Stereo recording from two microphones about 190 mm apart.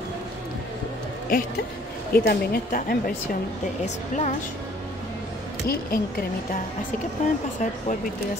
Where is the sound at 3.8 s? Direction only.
35° left (ahead or behind).